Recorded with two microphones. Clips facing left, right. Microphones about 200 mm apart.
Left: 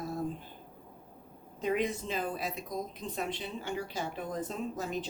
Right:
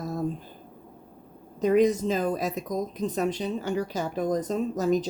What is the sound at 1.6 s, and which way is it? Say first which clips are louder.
Speech: right 10 dB; 40° right (ahead or behind).